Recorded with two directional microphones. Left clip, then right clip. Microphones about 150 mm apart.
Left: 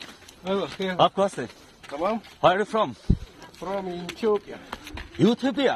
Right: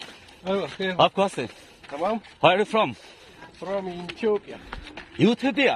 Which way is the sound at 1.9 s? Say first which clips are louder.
Even; 10° left (ahead or behind).